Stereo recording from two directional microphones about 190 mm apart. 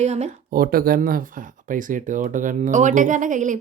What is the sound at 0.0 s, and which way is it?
Speech, 35° right (ahead or behind).